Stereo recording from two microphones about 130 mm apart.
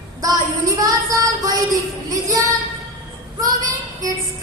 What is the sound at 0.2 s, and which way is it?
Female singing, 25° right (ahead or behind).